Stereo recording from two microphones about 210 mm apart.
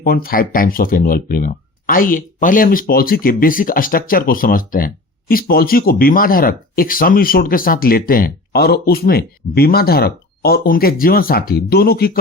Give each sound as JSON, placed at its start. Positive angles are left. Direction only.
{"t": 0.0, "sound": "speech", "side_deg": 45}